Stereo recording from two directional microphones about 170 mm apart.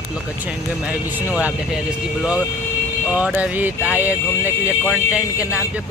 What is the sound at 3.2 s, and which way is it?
Speech, 10° right (ahead or behind).